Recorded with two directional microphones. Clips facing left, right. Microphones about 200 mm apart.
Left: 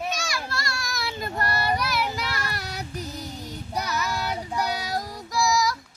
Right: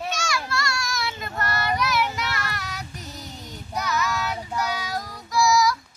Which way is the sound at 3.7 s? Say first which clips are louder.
Right 2 dB; 35° left (ahead or behind).